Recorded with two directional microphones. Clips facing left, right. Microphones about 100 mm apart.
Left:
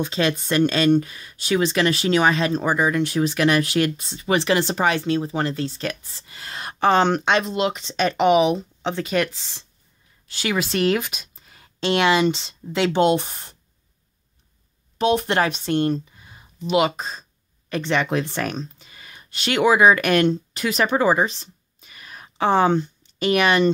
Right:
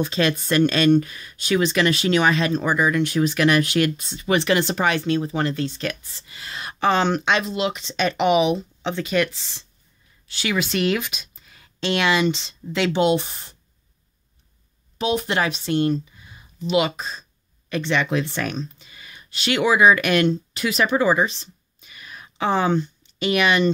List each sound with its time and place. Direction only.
0.0 s speech: 20° left (ahead or behind); by 13.6 s 50° left (ahead or behind)
15.0 s speech: 55° left (ahead or behind)